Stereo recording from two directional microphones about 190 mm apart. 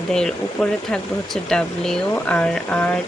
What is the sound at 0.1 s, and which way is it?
Speech, 5° left (ahead or behind).